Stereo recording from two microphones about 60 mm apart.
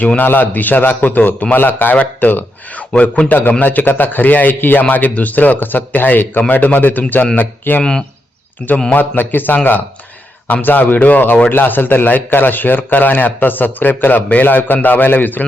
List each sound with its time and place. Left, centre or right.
0.2 s a man's voice: left
7.8 s speech: centre
8.9 s a man's voice: left